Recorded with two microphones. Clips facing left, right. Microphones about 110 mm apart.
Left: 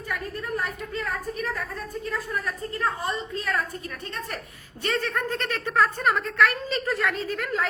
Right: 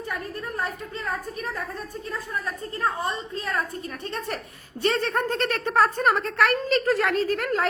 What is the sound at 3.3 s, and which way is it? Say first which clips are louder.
Speech: left 1 dB; 30° right (ahead or behind).